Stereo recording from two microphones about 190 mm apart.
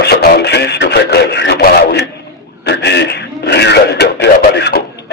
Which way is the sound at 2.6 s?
65° left (ahead or behind).